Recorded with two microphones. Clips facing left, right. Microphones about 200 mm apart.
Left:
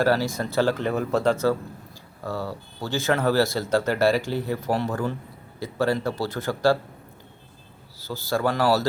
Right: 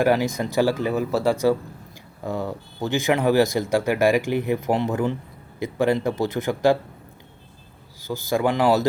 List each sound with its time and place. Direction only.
0.0 s a man's voice: 15° right (ahead or behind)
7.9 s speech: 15° right (ahead or behind)